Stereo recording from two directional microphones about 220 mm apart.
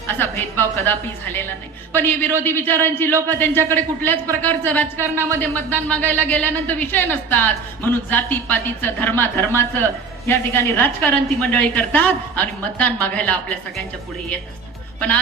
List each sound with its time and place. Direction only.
0.1 s a woman's voice: 10° left (ahead or behind)